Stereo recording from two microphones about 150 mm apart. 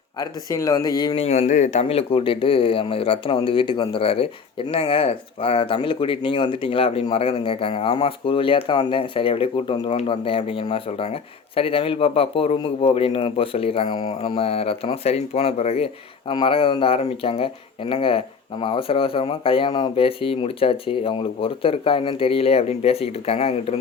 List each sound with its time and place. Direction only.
0.2 s speech: 25° left (ahead or behind)
1.1 s speech: 45° left (ahead or behind)